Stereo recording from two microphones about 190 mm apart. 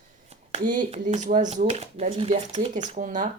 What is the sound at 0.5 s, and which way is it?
Speech, 40° right (ahead or behind).